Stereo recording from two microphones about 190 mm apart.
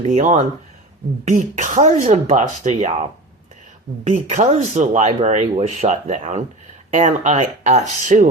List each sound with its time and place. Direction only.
0.0 s speech: 40° right (ahead or behind)